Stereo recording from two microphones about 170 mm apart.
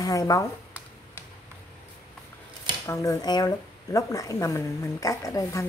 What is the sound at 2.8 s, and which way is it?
Speech, 20° left (ahead or behind).